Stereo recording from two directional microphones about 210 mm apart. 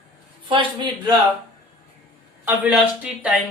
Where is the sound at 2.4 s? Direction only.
10° right (ahead or behind).